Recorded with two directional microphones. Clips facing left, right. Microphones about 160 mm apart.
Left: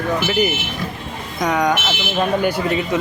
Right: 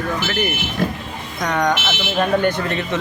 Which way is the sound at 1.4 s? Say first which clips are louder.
Left 1 dB; 5° left (ahead or behind).